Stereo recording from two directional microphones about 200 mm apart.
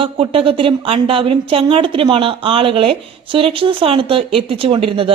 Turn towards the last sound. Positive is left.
turn(degrees=-25)  # may be behind; listen again after turning